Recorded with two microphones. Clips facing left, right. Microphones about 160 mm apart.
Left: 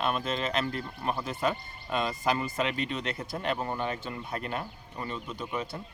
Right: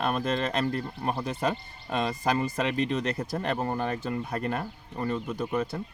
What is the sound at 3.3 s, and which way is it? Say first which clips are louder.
Speech: even; 45° right (ahead or behind).